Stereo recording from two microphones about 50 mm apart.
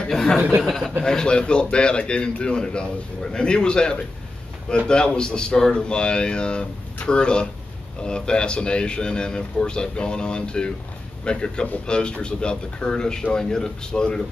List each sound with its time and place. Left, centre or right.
0.1 s speech: centre